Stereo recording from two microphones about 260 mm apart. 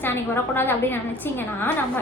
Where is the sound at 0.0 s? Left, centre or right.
Centre.